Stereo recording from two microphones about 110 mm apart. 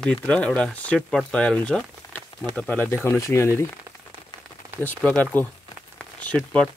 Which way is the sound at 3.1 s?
25° left (ahead or behind).